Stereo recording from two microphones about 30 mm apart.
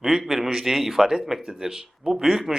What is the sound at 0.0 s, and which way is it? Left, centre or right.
A man's voice, centre.